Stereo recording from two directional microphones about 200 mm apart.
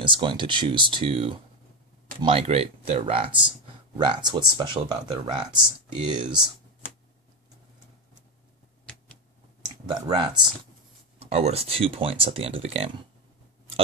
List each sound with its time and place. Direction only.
0.0 s speech: 25° right (ahead or behind)
9.8 s speech: 20° right (ahead or behind)
11.1 s speech: 30° right (ahead or behind)